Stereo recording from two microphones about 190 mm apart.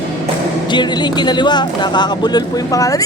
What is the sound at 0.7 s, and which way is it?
Speech, 25° left (ahead or behind).